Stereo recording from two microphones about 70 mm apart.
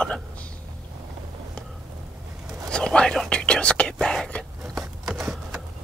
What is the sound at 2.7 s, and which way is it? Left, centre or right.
Whispering, centre.